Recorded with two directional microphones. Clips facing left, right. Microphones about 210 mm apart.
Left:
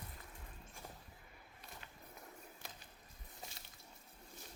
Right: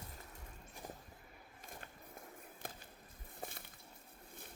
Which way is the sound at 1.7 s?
50° right (ahead or behind).